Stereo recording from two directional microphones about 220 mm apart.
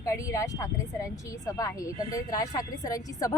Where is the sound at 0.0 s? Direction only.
15° left (ahead or behind).